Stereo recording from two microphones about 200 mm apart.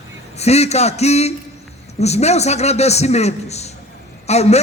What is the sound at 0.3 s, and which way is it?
A man's voice, 30° left (ahead or behind).